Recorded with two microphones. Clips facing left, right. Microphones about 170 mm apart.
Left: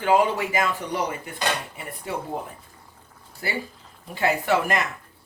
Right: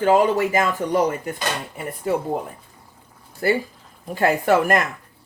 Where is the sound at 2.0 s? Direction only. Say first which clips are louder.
Right 9 dB; 50° right (ahead or behind).